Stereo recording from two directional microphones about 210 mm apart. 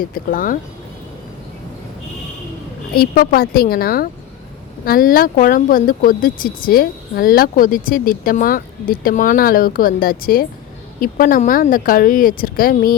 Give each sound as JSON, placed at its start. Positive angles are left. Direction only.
{"t": 0.0, "sound": "speech", "side_deg": 40}
{"t": 2.9, "sound": "speech", "side_deg": 45}